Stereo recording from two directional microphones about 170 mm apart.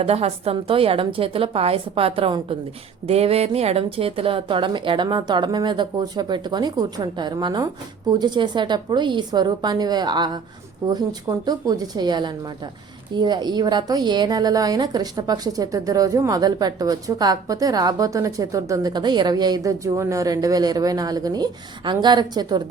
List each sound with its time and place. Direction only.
0.0 s a woman's voice: 35° right (ahead or behind)